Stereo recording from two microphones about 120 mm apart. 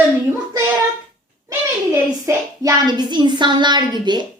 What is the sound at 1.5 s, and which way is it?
A child's voice, 25° right (ahead or behind).